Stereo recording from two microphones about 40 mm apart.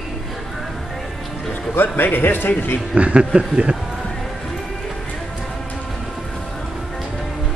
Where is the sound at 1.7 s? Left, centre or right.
Left.